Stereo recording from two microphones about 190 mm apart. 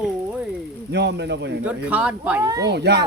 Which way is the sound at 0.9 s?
65° right (ahead or behind).